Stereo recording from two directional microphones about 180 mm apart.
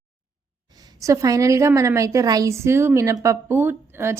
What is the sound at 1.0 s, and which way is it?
A woman's voice, 20° right (ahead or behind).